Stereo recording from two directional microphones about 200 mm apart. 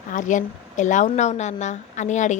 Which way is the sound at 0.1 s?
40° left (ahead or behind).